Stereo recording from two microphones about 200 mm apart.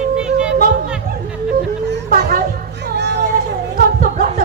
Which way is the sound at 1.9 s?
50° right (ahead or behind).